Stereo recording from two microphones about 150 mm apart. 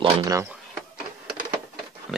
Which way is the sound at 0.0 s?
25° right (ahead or behind).